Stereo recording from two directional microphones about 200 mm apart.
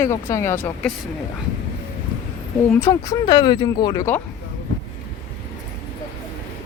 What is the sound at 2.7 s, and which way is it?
Speech, 15° left (ahead or behind).